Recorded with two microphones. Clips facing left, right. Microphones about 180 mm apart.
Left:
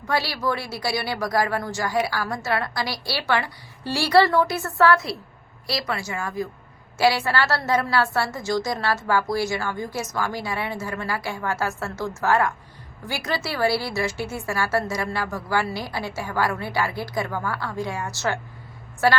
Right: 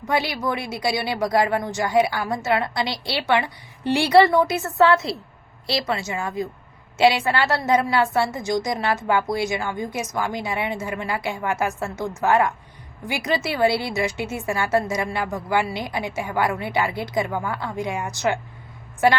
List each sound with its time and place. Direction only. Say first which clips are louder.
0.1 s a woman's voice: right 1 dB; 20° right (ahead or behind)